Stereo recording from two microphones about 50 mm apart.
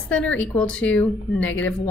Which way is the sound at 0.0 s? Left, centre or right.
Left.